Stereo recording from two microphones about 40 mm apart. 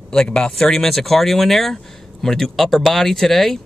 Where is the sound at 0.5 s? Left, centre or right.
Centre.